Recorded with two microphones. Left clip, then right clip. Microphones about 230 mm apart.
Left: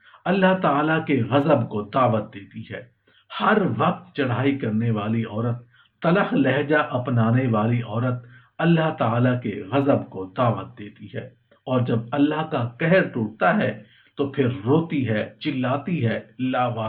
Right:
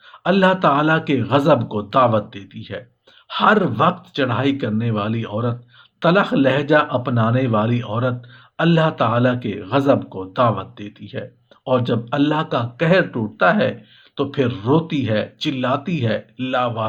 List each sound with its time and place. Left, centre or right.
0.2 s speech: right